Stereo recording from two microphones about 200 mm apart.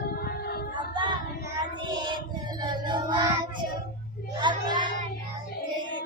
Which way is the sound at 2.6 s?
20° right (ahead or behind).